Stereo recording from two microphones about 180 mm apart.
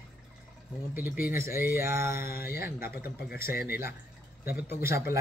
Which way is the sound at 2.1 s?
55° left (ahead or behind).